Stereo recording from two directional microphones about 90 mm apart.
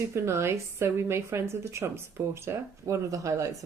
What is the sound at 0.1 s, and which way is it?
A woman's voice, 30° right (ahead or behind).